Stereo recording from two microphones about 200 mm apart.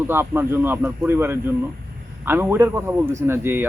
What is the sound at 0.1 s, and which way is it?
A man's voice, 10° right (ahead or behind).